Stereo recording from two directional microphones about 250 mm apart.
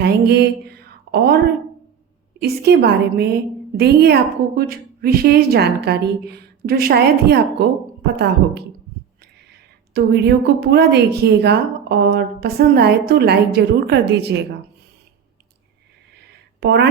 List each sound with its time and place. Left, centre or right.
0.0 s a sound: right
2.4 s a woman's voice: right
9.9 s a woman's voice: right
16.6 s speech: right